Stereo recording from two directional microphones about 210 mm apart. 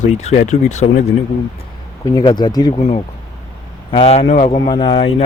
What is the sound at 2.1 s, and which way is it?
Speech, 20° left (ahead or behind).